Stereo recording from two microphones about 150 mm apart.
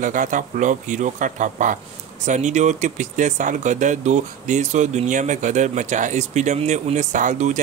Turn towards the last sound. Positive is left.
turn(degrees=-55)  # may be behind; listen again after turning